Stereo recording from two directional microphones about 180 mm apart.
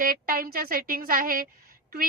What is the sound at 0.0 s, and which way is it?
A woman's voice, 55° right (ahead or behind).